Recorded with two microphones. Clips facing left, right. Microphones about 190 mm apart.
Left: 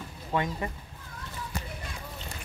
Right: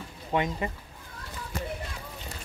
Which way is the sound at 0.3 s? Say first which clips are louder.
Right 2 dB; 20° right (ahead or behind).